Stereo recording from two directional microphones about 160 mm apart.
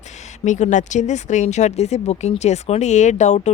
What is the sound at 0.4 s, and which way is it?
Speech, 50° left (ahead or behind).